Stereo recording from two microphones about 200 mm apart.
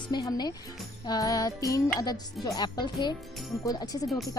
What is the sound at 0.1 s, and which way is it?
Speech, 20° left (ahead or behind).